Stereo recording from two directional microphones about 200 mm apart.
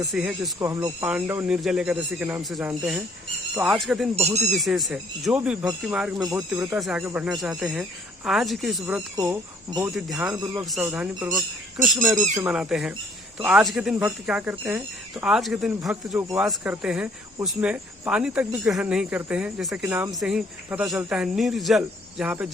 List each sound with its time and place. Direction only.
0.0 s speech: 5° right (ahead or behind)
0.6 s speech: 15° right (ahead or behind)
6.1 s speech: 20° right (ahead or behind)
6.5 s speech: 5° right (ahead or behind)
9.1 s speech: 15° right (ahead or behind)
9.8 s speech: 5° right (ahead or behind)
10.3 s speech: 20° right (ahead or behind)
10.6 s speech: centre (ahead or behind)